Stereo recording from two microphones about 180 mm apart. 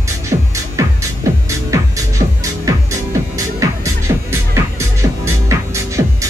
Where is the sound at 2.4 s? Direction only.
20° right (ahead or behind).